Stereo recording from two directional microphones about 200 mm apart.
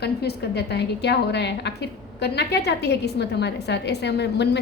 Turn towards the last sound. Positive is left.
turn(degrees=55)  # may be behind; listen again after turning